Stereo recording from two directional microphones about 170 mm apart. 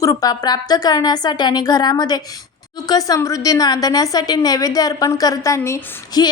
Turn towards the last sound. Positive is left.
turn(degrees=20)  # may be behind; listen again after turning